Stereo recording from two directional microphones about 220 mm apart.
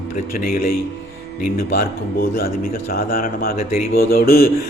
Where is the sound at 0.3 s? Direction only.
40° left (ahead or behind).